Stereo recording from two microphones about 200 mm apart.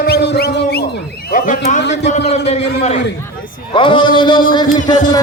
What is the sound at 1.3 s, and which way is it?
A man's voice, 40° left (ahead or behind).